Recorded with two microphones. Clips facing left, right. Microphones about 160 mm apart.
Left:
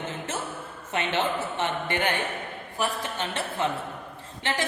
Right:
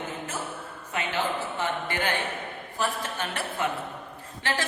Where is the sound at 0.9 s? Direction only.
25° left (ahead or behind).